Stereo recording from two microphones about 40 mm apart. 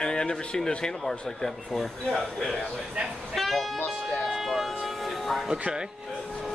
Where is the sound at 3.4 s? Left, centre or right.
Centre.